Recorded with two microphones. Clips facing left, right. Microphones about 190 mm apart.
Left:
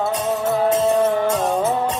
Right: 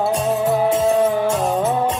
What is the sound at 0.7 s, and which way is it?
Music, 10° right (ahead or behind).